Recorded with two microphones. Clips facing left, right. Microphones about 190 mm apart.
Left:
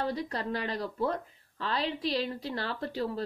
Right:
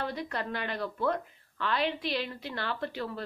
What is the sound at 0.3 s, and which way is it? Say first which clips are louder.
A woman's voice: left 1 dB; 35° left (ahead or behind).